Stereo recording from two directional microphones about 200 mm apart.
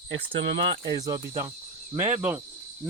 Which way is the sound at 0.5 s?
25° right (ahead or behind).